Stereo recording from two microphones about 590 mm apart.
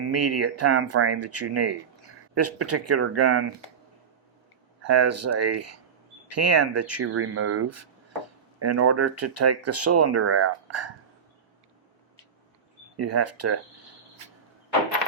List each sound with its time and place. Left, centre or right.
0.1 s speech: right
4.8 s speech: right
13.0 s speech: right